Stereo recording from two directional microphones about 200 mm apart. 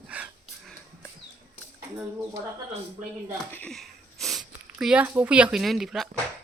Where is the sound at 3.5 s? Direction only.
5° left (ahead or behind).